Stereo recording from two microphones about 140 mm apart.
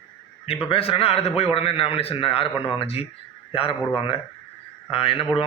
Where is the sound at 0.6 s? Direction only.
40° left (ahead or behind).